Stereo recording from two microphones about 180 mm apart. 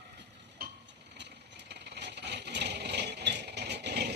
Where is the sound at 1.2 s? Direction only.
70° right (ahead or behind).